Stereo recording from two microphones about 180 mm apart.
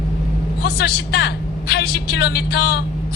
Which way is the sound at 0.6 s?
65° left (ahead or behind).